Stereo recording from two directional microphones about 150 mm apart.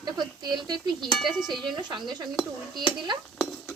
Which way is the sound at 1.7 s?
30° right (ahead or behind).